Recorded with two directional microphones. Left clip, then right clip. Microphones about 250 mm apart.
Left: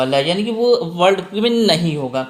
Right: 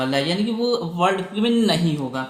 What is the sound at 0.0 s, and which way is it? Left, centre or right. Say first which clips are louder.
Speech: left 6 dB; left.